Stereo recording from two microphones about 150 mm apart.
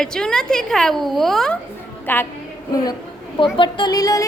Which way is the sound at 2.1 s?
15° left (ahead or behind).